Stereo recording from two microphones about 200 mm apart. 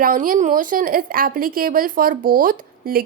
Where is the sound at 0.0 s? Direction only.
45° right (ahead or behind).